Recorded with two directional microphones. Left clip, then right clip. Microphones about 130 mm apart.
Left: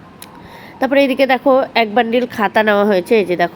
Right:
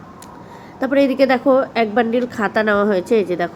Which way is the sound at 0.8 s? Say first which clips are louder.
Left 2 dB; 15° left (ahead or behind).